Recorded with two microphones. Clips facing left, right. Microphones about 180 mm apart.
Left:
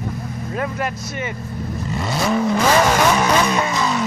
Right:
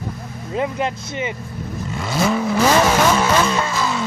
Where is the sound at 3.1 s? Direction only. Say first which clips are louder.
Even; 15° left (ahead or behind).